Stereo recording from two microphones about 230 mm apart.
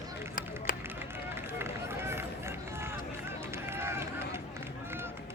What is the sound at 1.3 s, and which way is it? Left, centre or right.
Run, centre.